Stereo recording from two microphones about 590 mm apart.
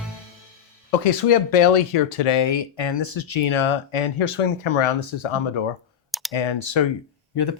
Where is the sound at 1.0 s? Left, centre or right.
Left.